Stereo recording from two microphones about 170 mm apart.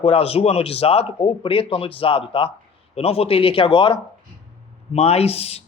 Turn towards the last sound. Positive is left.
turn(degrees=35)  # may be behind; listen again after turning